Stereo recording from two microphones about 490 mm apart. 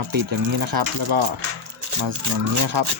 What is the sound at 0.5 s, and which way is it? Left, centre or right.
Speech, right.